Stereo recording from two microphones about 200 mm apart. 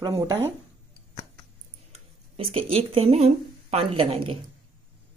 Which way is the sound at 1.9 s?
30° right (ahead or behind).